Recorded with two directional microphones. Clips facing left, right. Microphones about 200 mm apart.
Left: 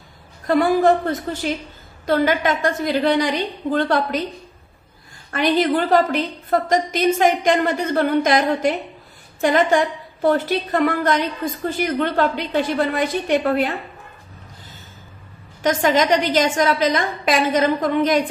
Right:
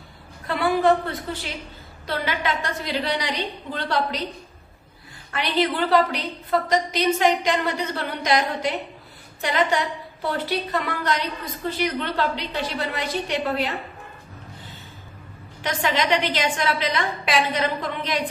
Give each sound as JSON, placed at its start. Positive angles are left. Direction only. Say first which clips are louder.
{"t": 0.5, "sound": "a woman's voice", "louder": "left 4 dB", "side_deg": 45}
{"t": 5.3, "sound": "a woman's voice", "louder": "left 6 dB", "side_deg": 45}
{"t": 15.6, "sound": "a woman's voice", "louder": "left 7 dB", "side_deg": 45}